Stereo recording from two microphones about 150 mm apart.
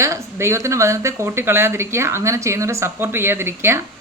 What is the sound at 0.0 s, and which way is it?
Speech, 20° right (ahead or behind).